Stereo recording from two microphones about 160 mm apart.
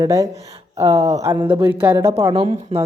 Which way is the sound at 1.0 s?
45° right (ahead or behind).